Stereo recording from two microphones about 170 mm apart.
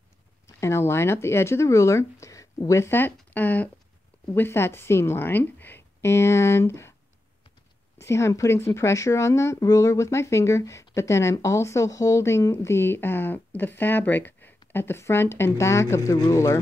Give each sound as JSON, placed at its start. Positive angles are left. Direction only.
{"t": 0.6, "sound": "speech", "side_deg": 15}
{"t": 8.0, "sound": "speech", "side_deg": 15}